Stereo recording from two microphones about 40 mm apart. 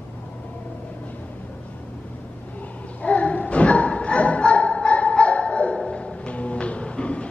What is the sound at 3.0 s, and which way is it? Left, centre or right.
Music, left.